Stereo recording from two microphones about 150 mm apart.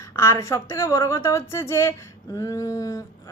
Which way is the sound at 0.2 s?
20° left (ahead or behind).